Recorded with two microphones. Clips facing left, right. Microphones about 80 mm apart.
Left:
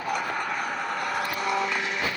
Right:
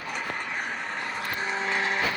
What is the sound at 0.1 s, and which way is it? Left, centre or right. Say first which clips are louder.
Vehicle: left 4 dB; left.